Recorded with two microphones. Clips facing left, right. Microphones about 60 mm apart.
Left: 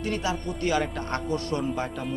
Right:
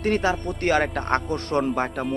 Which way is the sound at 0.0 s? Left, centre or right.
Right.